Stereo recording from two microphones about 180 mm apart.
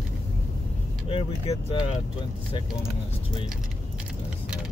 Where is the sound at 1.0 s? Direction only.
30° left (ahead or behind).